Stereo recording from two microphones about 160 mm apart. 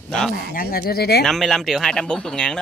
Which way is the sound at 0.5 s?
65° left (ahead or behind).